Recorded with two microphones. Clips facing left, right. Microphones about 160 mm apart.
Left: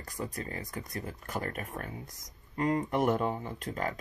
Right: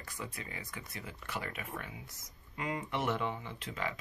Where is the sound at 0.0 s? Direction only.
40° left (ahead or behind).